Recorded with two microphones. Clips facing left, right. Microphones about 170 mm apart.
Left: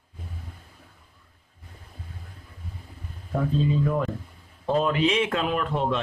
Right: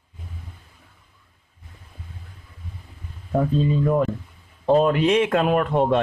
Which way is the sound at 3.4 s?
45° right (ahead or behind).